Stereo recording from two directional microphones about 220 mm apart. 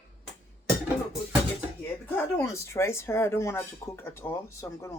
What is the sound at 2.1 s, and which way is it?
Speech, 10° left (ahead or behind).